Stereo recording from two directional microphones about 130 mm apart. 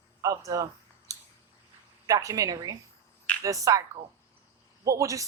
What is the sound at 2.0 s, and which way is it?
A woman's voice, 25° right (ahead or behind).